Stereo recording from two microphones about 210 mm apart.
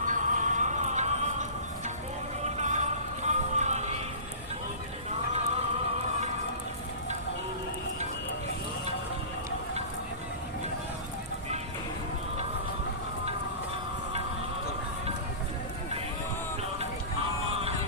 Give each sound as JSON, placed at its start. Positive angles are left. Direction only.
{"t": 0.1, "sound": "music", "side_deg": -35}